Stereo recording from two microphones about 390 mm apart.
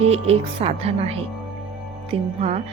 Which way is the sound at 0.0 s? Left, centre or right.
Centre.